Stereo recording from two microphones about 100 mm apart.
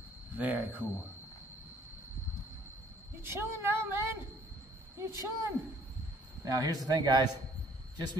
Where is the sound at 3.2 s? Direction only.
20° right (ahead or behind).